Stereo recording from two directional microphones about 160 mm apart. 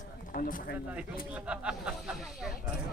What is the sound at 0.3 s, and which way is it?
Speech, 60° left (ahead or behind).